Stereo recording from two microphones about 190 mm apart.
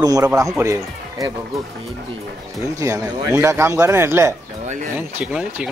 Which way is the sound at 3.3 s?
10° right (ahead or behind).